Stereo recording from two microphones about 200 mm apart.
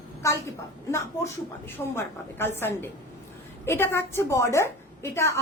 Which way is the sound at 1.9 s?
10° left (ahead or behind).